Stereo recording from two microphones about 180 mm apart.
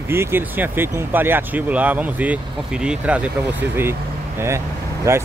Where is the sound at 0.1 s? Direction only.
15° right (ahead or behind).